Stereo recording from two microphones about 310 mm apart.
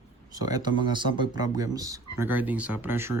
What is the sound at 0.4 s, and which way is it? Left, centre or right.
Speech, centre.